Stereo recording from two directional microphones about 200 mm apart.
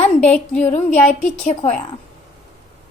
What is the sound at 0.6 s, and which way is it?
A woman's voice, 40° left (ahead or behind).